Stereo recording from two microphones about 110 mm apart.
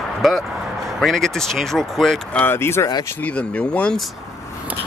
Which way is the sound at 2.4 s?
20° left (ahead or behind).